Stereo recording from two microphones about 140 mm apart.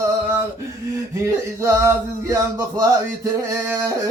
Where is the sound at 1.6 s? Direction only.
20° right (ahead or behind).